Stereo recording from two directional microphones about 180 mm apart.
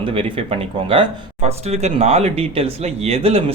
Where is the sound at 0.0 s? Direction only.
30° right (ahead or behind).